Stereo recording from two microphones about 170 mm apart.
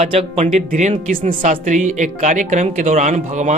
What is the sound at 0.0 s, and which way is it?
Speech, 35° right (ahead or behind).